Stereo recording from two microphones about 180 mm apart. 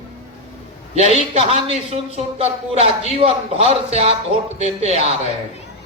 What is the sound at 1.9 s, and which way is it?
A man's voice, 35° right (ahead or behind).